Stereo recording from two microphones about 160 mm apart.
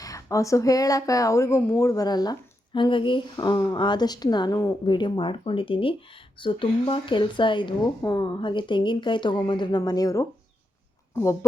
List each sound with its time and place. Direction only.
0.0 s speech: 20° left (ahead or behind)